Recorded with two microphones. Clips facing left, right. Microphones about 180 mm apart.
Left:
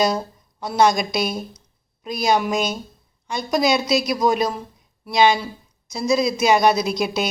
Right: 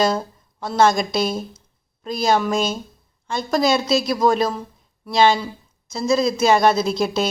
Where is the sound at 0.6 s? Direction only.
15° left (ahead or behind).